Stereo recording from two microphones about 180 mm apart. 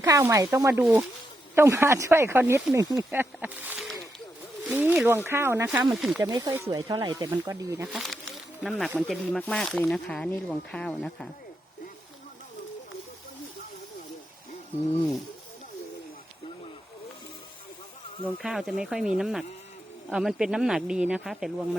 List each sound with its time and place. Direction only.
0.0 s speech: 15° right (ahead or behind)
6.2 s speech: 20° right (ahead or behind)
7.9 s snake: centre (ahead or behind)
9.0 s speech: 5° left (ahead or behind)
18.4 s speech: centre (ahead or behind)